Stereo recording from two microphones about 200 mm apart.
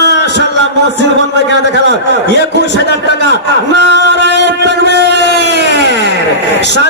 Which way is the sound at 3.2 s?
60° right (ahead or behind).